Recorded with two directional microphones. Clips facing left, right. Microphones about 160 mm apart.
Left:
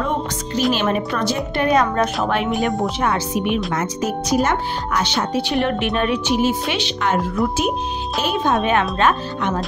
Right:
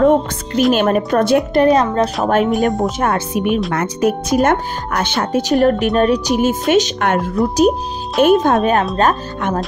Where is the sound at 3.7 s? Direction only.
60° right (ahead or behind).